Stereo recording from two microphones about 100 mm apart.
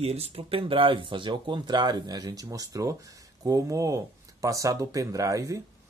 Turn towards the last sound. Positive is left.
turn(degrees=-30)  # may be behind; listen again after turning